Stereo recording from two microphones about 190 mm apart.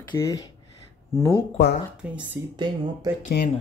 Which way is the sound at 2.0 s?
10° right (ahead or behind).